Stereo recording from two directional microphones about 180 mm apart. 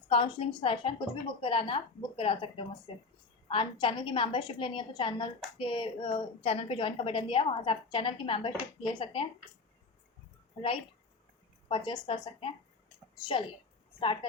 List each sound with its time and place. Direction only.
0.1 s a woman's voice: 30° left (ahead or behind)
11.7 s a woman's voice: 25° left (ahead or behind)
14.0 s a woman's voice: 30° left (ahead or behind)